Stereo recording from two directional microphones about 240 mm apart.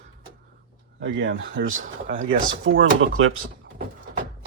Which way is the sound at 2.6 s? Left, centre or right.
Right.